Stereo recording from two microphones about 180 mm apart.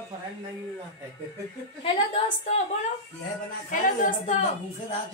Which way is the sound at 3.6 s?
45° left (ahead or behind).